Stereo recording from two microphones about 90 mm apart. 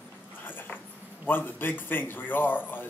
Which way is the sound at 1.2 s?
20° left (ahead or behind).